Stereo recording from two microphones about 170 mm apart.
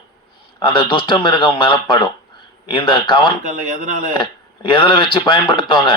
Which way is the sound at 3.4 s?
50° right (ahead or behind).